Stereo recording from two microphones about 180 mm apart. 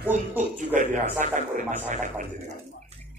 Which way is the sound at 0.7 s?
45° right (ahead or behind).